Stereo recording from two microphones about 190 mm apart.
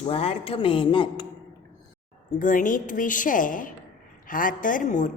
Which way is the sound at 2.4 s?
45° left (ahead or behind).